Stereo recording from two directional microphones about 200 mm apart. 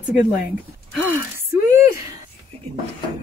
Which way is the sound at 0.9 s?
10° right (ahead or behind).